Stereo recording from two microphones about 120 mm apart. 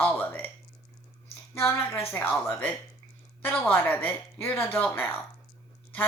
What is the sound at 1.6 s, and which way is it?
Speech, 20° left (ahead or behind).